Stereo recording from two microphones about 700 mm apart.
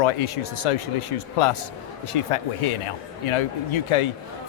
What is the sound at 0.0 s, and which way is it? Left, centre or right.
Speech, left.